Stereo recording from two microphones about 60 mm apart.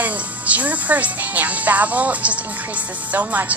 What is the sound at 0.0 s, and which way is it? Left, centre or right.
Speech, right.